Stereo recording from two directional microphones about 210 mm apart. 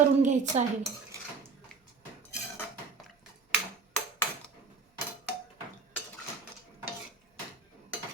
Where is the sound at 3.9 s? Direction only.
5° left (ahead or behind).